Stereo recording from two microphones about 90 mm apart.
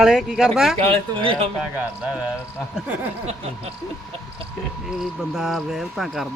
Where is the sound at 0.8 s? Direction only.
90° right.